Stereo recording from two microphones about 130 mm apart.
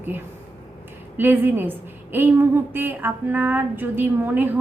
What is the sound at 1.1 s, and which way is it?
A woman's voice, 15° right (ahead or behind).